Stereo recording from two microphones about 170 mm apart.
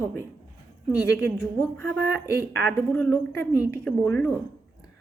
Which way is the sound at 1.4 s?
15° left (ahead or behind).